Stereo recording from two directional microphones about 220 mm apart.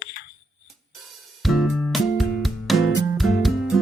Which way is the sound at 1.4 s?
Centre (ahead or behind).